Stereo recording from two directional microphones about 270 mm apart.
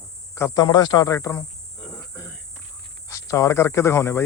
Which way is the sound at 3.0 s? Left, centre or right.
Centre.